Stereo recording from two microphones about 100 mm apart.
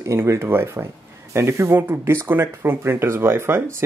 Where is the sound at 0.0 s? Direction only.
30° right (ahead or behind).